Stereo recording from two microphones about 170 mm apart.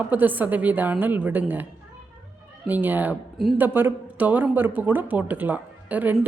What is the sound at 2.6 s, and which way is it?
A woman's voice, 10° right (ahead or behind).